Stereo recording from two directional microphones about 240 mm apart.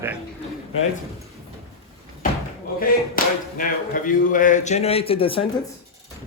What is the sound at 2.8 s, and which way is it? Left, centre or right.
Speech, left.